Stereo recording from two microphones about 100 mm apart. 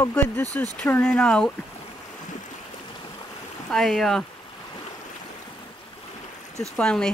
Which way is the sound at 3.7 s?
Centre (ahead or behind).